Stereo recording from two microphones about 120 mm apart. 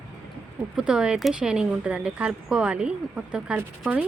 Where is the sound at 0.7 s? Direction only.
5° right (ahead or behind).